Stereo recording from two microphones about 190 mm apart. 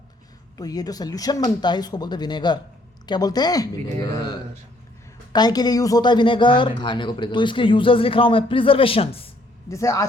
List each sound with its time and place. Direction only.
0.5 s speech: 20° left (ahead or behind)
9.6 s speech: 15° left (ahead or behind)